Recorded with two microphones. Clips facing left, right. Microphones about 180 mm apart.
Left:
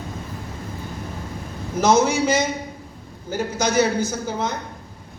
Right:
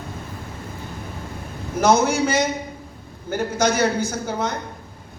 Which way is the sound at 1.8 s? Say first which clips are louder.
Even; 55° right (ahead or behind).